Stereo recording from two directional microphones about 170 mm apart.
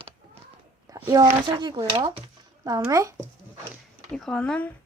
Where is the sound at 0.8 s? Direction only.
20° right (ahead or behind).